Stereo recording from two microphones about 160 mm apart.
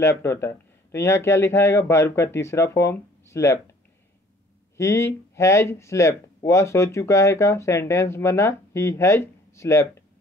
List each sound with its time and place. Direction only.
0.0 s speech: 15° left (ahead or behind)
4.7 s speech: 15° left (ahead or behind)